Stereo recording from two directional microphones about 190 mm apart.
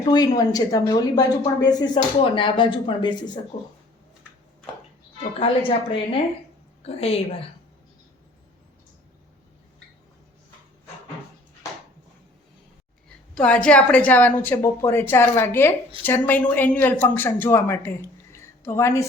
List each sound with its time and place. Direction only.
0.0 s speech: 20° left (ahead or behind)
5.4 s a woman's voice: 30° left (ahead or behind)
13.3 s speech: 5° left (ahead or behind)